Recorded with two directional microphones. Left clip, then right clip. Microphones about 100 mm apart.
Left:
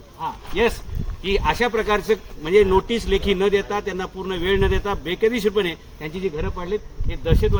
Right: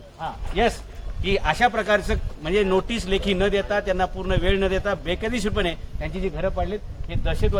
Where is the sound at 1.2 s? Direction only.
30° right (ahead or behind).